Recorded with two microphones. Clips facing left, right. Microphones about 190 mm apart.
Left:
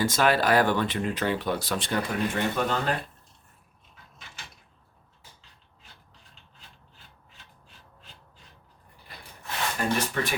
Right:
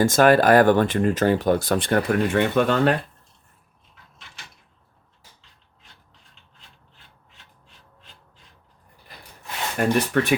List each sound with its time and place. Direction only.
0.0 s speech: 50° right (ahead or behind); by 2.9 s 65° right (ahead or behind)
9.8 s speech: 65° right (ahead or behind)